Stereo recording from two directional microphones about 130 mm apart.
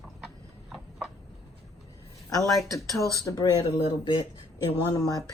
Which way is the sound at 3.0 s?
25° right (ahead or behind).